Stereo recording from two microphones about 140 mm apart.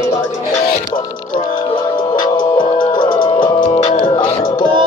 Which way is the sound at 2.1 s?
30° left (ahead or behind).